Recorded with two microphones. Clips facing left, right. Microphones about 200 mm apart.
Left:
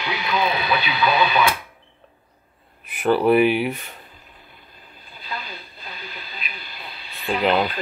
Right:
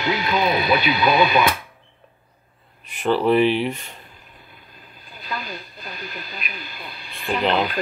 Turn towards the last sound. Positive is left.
turn(degrees=5)  # may be behind; listen again after turning